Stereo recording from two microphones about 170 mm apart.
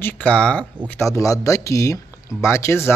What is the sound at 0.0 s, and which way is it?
Speech, 10° left (ahead or behind).